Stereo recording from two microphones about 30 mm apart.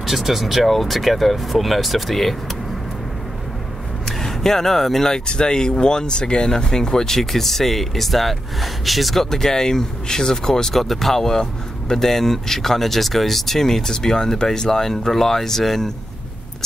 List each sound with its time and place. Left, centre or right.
0.0 s speech: centre
4.2 s speech: centre
5.1 s speech: left
7.2 s speech: centre
9.1 s speech: centre
10.8 s speech: centre